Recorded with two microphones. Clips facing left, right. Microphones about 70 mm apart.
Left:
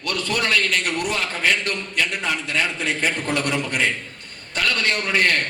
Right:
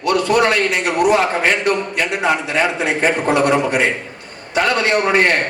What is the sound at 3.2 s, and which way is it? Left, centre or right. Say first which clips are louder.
A man's voice: right 9 dB; centre.